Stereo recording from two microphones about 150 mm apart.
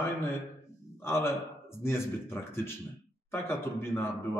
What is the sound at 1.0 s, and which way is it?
Speech, 15° left (ahead or behind).